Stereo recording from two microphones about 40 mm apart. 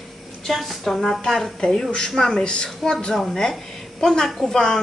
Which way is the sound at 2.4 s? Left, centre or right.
Left.